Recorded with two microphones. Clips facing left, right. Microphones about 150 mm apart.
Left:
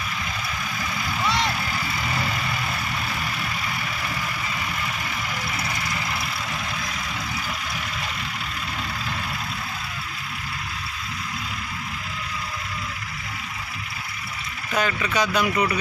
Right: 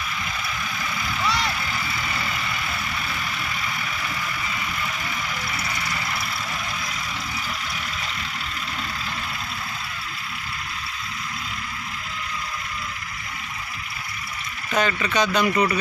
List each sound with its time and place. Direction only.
1.2 s vehicle: 20° left (ahead or behind)
14.7 s speech: 10° left (ahead or behind)